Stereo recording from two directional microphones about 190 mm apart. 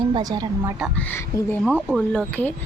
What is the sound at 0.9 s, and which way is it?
Speech, 10° left (ahead or behind).